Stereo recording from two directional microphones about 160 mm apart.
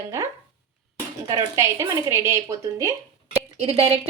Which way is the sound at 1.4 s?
20° right (ahead or behind).